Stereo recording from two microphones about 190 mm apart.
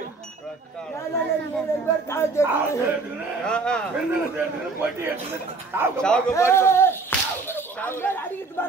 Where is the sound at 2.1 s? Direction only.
15° left (ahead or behind).